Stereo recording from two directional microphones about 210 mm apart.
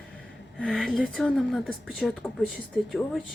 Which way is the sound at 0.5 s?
5° left (ahead or behind).